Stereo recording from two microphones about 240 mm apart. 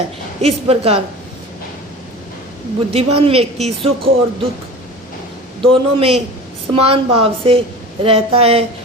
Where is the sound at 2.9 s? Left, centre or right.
Right.